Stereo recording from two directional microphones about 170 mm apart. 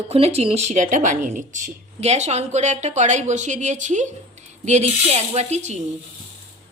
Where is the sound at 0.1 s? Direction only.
35° right (ahead or behind).